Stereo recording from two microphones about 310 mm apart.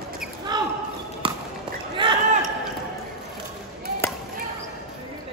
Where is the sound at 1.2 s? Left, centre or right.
Centre.